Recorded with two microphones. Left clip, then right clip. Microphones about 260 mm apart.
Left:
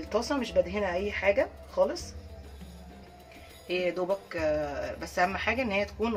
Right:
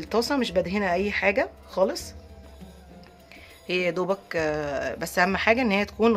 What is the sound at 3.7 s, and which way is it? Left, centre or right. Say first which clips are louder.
Speech: right 4 dB; right.